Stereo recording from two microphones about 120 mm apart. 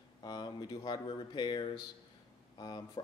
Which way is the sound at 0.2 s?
35° left (ahead or behind).